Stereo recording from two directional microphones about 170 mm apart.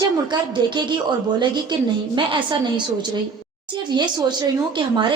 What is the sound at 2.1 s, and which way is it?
Speech, 30° right (ahead or behind).